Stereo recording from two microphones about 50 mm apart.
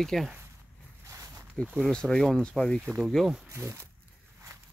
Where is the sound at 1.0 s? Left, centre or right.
Right.